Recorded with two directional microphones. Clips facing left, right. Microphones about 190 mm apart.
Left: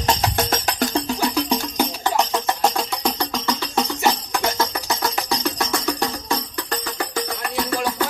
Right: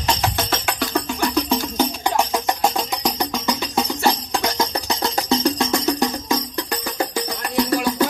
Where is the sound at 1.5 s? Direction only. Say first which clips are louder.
Right 2 dB; 10° left (ahead or behind).